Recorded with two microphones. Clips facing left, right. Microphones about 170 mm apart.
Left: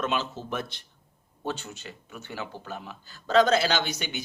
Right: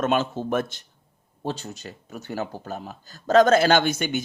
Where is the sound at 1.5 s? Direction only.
35° right (ahead or behind).